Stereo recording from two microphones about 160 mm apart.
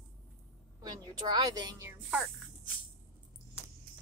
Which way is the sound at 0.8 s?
25° right (ahead or behind).